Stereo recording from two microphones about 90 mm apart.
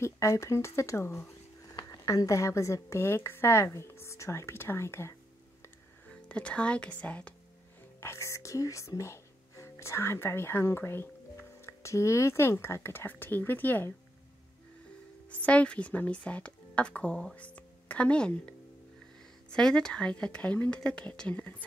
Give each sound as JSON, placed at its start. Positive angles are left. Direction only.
{"t": 0.0, "sound": "a woman's voice", "side_deg": 35}
{"t": 6.0, "sound": "speech", "side_deg": 15}
{"t": 8.0, "sound": "speech", "side_deg": 30}
{"t": 15.4, "sound": "a woman's voice", "side_deg": 15}
{"t": 19.5, "sound": "a woman's voice", "side_deg": 10}